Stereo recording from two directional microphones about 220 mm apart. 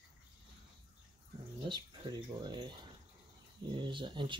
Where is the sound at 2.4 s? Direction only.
20° right (ahead or behind).